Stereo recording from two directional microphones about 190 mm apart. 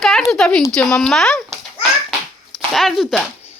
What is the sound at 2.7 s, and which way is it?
Speech, centre (ahead or behind).